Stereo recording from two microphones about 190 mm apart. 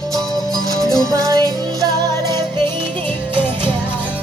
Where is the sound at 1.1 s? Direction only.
20° right (ahead or behind).